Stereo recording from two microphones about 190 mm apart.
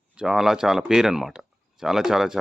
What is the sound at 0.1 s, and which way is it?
Speech, 5° right (ahead or behind).